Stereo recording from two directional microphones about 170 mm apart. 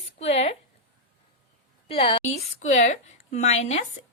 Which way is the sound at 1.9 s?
35° left (ahead or behind).